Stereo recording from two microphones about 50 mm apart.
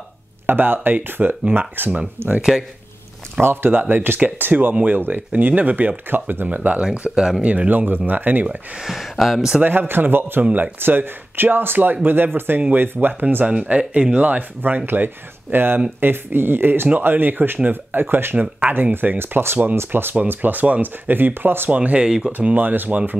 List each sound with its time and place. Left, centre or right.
0.5 s speech: right
2.2 s speech: right
3.3 s speech: right
6.8 s speech: right
7.2 s speech: centre
7.4 s speech: right
8.7 s speech: centre
9.6 s speech: right
13.5 s speech: right
21.6 s speech: right
22.0 s speech: centre
22.4 s speech: right